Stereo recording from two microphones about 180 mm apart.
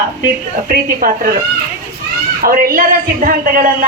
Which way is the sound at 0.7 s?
55° right (ahead or behind).